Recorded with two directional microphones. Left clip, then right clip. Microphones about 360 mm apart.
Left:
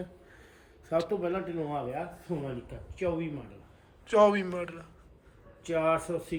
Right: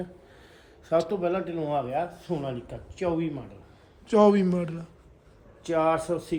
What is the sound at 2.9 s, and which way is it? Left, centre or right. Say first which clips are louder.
Speech: right 4 dB; right.